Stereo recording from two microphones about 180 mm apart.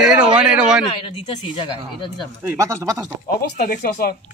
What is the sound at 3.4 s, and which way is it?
Speech, 55° left (ahead or behind).